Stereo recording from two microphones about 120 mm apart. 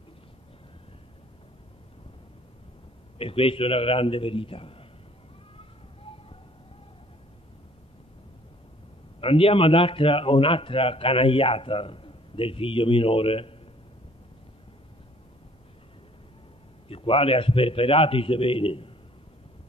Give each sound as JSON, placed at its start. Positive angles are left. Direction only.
{"t": 3.2, "sound": "a man's voice", "side_deg": 50}
{"t": 5.6, "sound": "a sound", "side_deg": 50}
{"t": 9.2, "sound": "a man's voice", "side_deg": 50}
{"t": 16.9, "sound": "a man's voice", "side_deg": 50}